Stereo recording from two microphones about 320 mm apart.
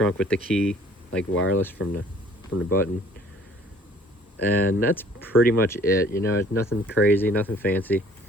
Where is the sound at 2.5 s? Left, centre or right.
Left.